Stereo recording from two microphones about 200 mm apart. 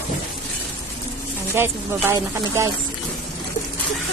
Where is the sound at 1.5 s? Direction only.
10° right (ahead or behind).